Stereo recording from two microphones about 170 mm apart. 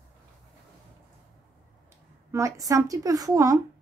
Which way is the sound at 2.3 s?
20° right (ahead or behind).